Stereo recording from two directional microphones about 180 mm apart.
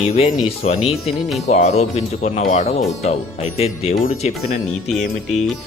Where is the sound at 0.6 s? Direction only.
35° left (ahead or behind).